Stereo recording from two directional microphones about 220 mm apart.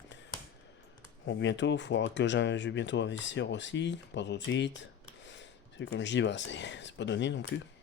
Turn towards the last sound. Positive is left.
turn(degrees=55)  # may be behind; listen again after turning